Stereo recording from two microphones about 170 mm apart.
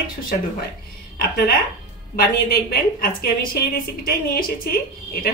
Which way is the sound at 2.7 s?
60° left (ahead or behind).